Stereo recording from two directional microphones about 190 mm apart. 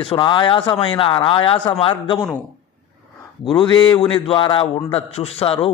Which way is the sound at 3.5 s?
25° left (ahead or behind).